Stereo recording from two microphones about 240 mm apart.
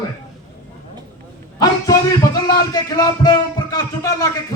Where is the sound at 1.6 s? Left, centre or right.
Centre.